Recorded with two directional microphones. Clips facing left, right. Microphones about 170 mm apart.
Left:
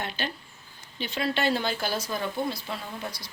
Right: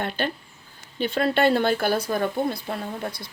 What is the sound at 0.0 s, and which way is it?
Speech, 55° right (ahead or behind).